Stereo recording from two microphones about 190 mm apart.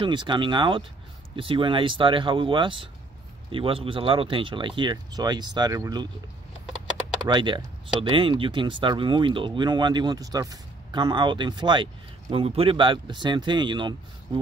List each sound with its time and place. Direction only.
0.0 s speech: 25° right (ahead or behind)
7.2 s speech: 25° right (ahead or behind)